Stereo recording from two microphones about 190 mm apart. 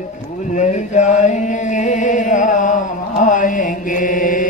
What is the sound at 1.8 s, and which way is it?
Mantra, 40° left (ahead or behind).